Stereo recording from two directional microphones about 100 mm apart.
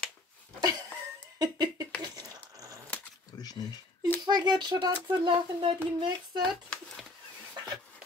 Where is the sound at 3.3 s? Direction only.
40° left (ahead or behind).